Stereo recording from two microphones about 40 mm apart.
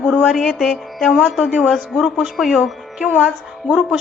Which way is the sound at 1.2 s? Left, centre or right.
Centre.